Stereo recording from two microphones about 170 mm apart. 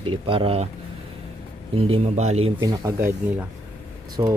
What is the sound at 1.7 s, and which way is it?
Speech, 35° right (ahead or behind).